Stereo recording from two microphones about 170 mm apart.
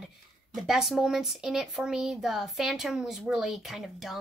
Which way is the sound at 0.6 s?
Centre (ahead or behind).